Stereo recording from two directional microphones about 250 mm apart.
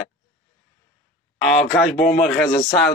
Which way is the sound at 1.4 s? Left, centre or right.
Centre.